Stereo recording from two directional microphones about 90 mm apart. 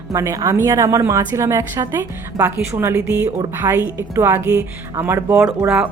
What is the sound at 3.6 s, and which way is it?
Speech, 45° right (ahead or behind).